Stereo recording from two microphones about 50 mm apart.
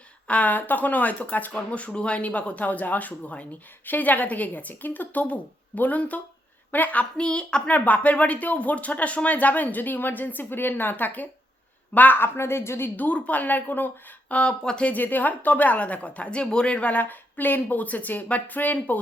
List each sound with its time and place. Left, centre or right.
0.3 s speech: left
7.2 s a woman's voice: centre
7.7 s a woman's voice: left
13.0 s speech: left
14.3 s a woman's voice: centre
14.8 s speech: left